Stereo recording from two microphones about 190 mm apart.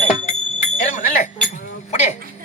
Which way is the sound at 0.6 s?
40° left (ahead or behind).